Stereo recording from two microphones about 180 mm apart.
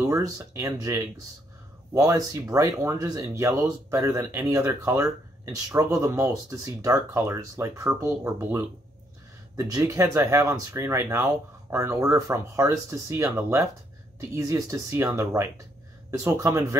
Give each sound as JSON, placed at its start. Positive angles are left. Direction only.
{"t": 0.0, "sound": "speech", "side_deg": -20}